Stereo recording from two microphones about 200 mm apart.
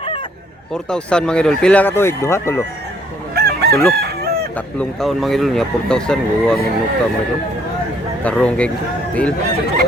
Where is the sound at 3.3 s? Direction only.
55° right (ahead or behind).